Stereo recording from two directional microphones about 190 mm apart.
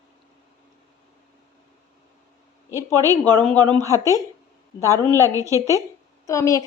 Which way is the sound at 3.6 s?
25° right (ahead or behind).